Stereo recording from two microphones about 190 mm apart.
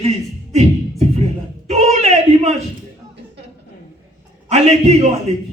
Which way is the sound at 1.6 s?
35° right (ahead or behind).